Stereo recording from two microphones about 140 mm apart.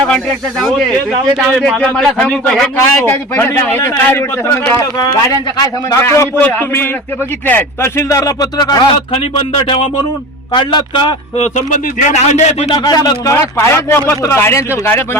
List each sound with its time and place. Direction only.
0.1 s a man's voice: 5° left (ahead or behind)
3.0 s a man's voice: 15° left (ahead or behind)
6.0 s a man's voice: 20° left (ahead or behind)
9.1 s speech: 40° left (ahead or behind)
11.3 s speech: 55° left (ahead or behind)
12.7 s a man's voice: 30° left (ahead or behind)